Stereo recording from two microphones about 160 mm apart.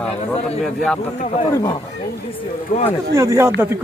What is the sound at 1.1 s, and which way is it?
Speech, 40° left (ahead or behind).